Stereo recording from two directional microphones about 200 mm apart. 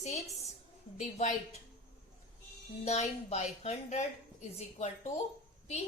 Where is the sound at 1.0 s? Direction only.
35° left (ahead or behind).